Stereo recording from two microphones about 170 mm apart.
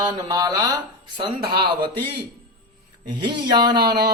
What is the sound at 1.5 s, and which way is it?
Speech, 65° right (ahead or behind).